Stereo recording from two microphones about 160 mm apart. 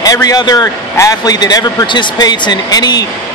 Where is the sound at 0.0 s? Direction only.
25° left (ahead or behind).